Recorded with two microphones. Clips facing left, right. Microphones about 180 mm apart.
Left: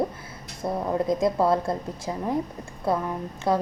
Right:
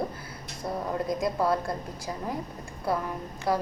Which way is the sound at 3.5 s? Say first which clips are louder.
Left 3 dB; 25° left (ahead or behind).